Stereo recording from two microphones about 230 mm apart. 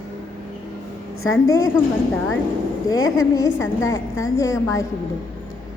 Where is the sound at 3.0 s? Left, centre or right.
Left.